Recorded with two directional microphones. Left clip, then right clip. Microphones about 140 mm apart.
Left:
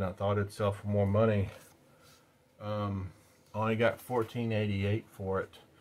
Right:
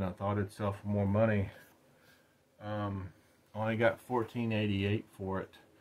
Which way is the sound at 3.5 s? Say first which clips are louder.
Left 3 dB; 35° left (ahead or behind).